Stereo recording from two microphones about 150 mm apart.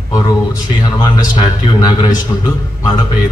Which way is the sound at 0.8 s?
25° left (ahead or behind).